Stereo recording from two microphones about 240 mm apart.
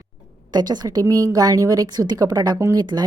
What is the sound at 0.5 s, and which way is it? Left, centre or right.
A woman's voice, centre.